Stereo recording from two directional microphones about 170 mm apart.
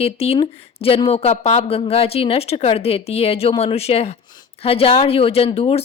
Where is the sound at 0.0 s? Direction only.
35° left (ahead or behind).